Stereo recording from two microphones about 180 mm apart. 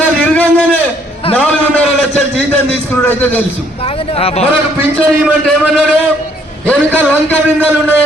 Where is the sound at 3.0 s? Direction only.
10° left (ahead or behind).